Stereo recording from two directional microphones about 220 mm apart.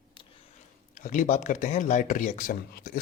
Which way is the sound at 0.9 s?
35° left (ahead or behind).